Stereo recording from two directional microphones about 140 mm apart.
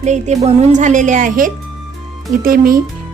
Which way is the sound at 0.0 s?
55° right (ahead or behind).